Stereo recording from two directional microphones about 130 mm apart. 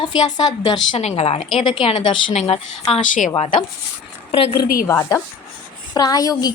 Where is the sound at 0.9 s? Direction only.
50° left (ahead or behind).